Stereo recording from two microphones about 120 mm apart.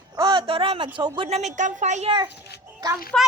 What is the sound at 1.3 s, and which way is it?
Speech, 65° right (ahead or behind).